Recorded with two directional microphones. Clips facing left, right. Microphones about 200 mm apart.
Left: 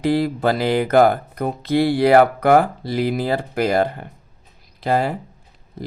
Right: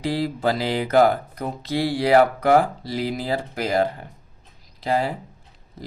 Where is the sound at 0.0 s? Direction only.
55° left (ahead or behind).